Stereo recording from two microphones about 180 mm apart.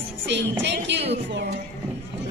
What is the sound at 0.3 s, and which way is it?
Speech, 75° right (ahead or behind).